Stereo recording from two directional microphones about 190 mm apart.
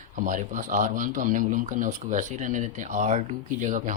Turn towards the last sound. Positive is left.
turn(degrees=-40)  # may be behind; listen again after turning